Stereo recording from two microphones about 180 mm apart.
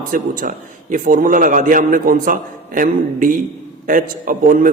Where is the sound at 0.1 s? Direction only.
50° right (ahead or behind).